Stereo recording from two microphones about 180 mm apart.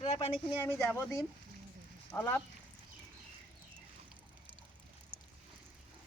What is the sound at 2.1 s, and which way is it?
Speech, 15° left (ahead or behind).